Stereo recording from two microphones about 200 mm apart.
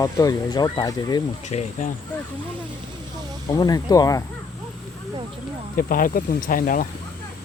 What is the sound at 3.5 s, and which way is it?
Speech, 20° left (ahead or behind).